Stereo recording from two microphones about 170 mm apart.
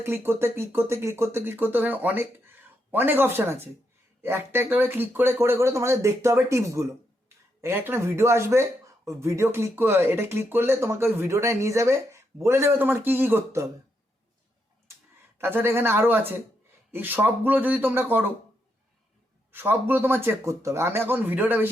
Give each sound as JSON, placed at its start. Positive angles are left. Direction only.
{"t": 0.0, "sound": "speech", "side_deg": -15}
{"t": 15.4, "sound": "speech", "side_deg": -15}
{"t": 19.5, "sound": "speech", "side_deg": -10}